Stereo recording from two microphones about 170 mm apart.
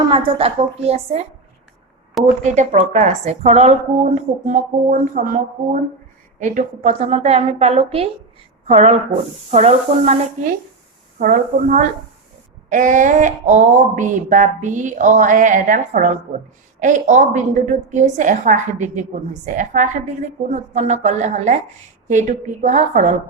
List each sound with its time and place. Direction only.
0.1 s a woman's voice: 30° right (ahead or behind)
2.4 s a woman's voice: 45° right (ahead or behind)
11.2 s a woman's voice: 50° right (ahead or behind)